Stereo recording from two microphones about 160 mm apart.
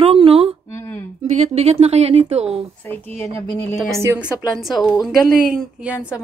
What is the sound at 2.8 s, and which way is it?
Speech, 10° left (ahead or behind).